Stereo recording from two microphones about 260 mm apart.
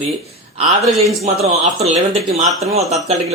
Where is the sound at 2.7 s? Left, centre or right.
Right.